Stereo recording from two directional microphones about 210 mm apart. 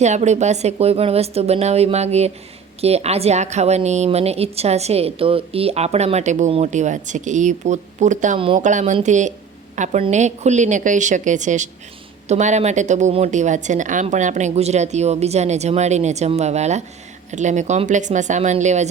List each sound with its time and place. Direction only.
0.0 s a woman's voice: 35° right (ahead or behind)